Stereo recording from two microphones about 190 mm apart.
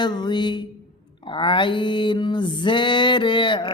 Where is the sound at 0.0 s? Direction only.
25° left (ahead or behind).